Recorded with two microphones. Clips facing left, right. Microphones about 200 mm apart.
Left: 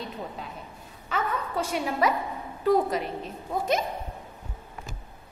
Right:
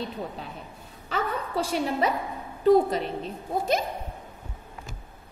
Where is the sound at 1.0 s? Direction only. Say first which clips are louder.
Even; 30° right (ahead or behind).